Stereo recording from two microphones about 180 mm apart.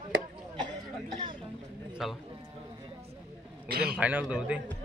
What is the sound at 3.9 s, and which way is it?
Speech, 10° right (ahead or behind).